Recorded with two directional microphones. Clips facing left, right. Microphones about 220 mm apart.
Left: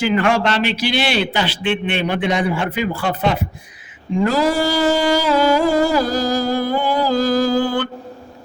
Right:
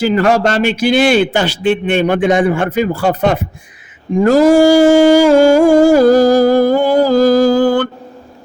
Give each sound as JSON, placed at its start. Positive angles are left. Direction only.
{"t": 0.0, "sound": "humming", "side_deg": -40}